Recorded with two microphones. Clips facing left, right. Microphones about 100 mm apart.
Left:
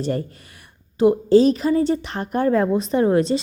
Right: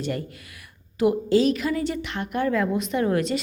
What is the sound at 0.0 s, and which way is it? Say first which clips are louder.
A woman's voice: left 5 dB; 35° left (ahead or behind).